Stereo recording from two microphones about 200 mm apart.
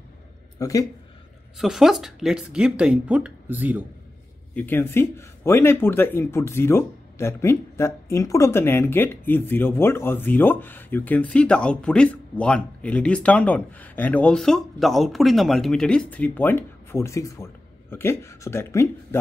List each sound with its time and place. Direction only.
0.6 s speech: 15° left (ahead or behind)
1.6 s speech: centre (ahead or behind)
4.6 s speech: 10° left (ahead or behind)